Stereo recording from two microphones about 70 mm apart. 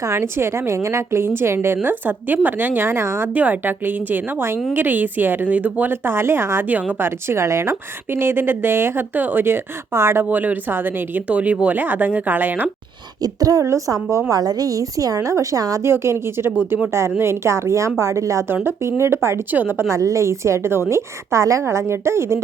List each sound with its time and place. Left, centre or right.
0.0 s a woman's voice: right
3.3 s a woman's voice: right
10.2 s speech: right
13.2 s a woman's voice: right
13.7 s a woman's voice: right
14.3 s a woman's voice: right
15.8 s a woman's voice: right
18.4 s a woman's voice: right
19.5 s speech: right
19.9 s a woman's voice: right